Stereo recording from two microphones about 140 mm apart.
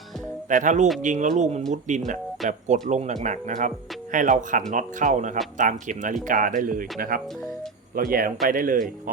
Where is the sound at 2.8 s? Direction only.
60° right (ahead or behind); by 6.8 s 75° right (ahead or behind).